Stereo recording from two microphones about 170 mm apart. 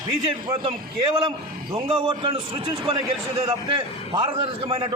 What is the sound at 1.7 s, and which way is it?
A man's voice, 30° right (ahead or behind).